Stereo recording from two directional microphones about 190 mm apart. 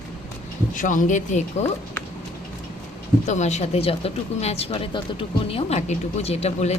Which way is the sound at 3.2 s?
40° left (ahead or behind).